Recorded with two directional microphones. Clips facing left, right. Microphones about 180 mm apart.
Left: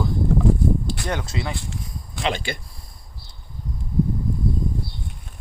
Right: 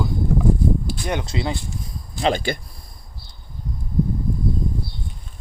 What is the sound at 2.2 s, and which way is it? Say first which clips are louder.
Speech: right 5 dB; 40° right (ahead or behind).